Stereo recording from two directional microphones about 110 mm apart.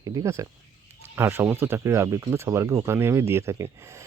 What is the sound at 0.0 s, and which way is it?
Speech, 30° right (ahead or behind).